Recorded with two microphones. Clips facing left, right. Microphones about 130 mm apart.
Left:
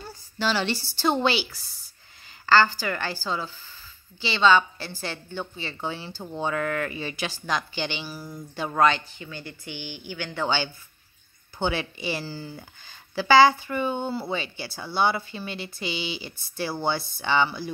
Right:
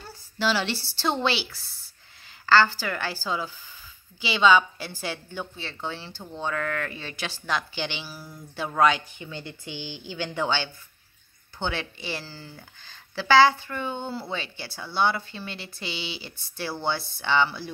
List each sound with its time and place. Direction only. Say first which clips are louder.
0.4 s a woman's voice: even; 5° right (ahead or behind)
9.2 s speech: right 1 dB; 20° right (ahead or behind)
10.4 s speech: left 2 dB; 5° left (ahead or behind)